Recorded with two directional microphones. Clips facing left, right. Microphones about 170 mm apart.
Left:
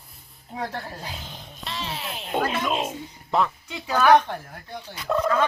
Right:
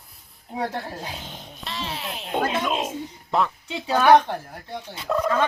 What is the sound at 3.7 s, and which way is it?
Speech, 25° right (ahead or behind).